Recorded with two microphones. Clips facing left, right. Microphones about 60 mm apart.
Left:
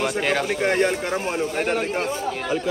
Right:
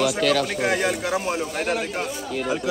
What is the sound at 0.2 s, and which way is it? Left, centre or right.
Speech, left.